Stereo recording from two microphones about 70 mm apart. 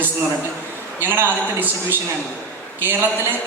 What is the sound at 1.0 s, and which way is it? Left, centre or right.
Speech, right.